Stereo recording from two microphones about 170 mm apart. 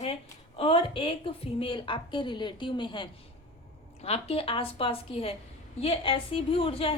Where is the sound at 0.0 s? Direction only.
35° left (ahead or behind).